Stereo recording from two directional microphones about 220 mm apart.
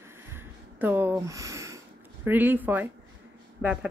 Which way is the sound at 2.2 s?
10° right (ahead or behind).